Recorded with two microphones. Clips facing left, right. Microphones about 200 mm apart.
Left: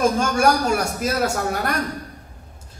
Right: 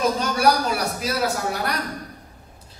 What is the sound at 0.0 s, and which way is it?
A man's voice, 50° left (ahead or behind).